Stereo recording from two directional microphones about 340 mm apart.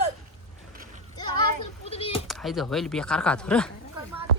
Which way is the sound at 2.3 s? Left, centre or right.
Centre.